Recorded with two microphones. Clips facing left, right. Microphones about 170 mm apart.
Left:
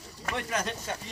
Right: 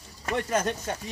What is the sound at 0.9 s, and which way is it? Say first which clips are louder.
Speech: right 3 dB; 45° right (ahead or behind).